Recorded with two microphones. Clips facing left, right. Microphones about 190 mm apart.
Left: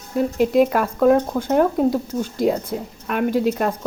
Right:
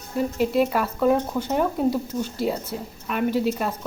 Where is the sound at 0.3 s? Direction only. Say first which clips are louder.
Left 5 dB; 45° left (ahead or behind).